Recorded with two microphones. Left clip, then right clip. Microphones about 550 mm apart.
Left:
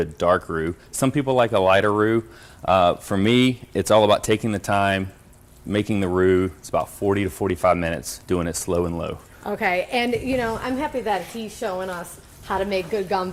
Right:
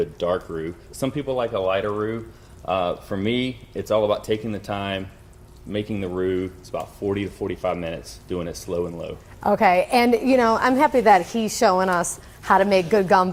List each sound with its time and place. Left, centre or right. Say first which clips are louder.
0.0 s speech: left 4 dB; left
2.6 s speech: left 6 dB; left
9.4 s a woman's voice: right 6 dB; right
12.5 s a woman's voice: right 7 dB; right